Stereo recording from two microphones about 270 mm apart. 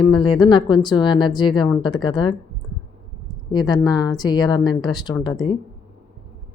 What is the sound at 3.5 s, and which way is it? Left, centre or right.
Speech, centre.